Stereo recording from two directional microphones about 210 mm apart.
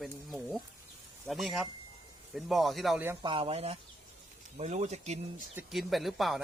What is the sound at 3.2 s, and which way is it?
Speech, 25° right (ahead or behind).